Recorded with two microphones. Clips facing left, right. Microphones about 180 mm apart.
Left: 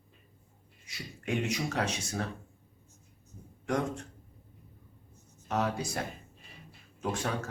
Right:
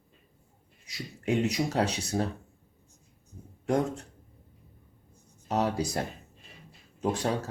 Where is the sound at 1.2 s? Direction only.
35° right (ahead or behind).